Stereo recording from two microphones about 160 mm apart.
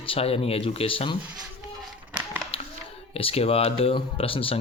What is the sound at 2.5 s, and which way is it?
Hands, 35° left (ahead or behind).